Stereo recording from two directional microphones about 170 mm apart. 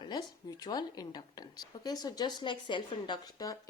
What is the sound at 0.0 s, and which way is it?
Speech, 25° left (ahead or behind).